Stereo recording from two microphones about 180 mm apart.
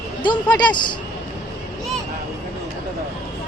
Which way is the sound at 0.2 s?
25° left (ahead or behind).